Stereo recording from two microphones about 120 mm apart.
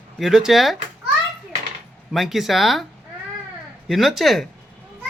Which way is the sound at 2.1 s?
Centre (ahead or behind).